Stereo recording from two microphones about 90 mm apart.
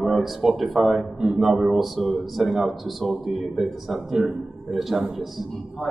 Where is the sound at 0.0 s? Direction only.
Centre (ahead or behind).